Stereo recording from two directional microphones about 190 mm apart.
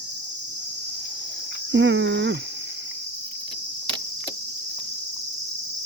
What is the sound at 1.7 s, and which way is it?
Cricket, 75° right (ahead or behind).